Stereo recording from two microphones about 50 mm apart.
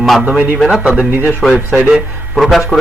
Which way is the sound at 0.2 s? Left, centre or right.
Centre.